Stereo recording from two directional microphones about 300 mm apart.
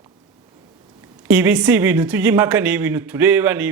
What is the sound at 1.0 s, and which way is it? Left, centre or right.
Speech, centre.